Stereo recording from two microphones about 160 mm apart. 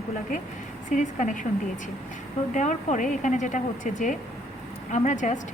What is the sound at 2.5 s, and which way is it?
A woman's voice, 50° left (ahead or behind).